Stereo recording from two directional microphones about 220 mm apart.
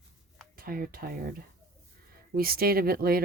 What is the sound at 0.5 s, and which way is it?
Speech, 40° right (ahead or behind).